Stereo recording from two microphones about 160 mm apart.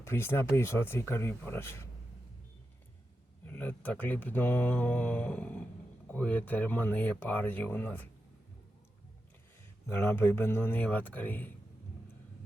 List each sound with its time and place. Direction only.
0.0 s speech: 15° left (ahead or behind)
3.4 s speech: 10° left (ahead or behind)
9.8 s speech: 15° left (ahead or behind)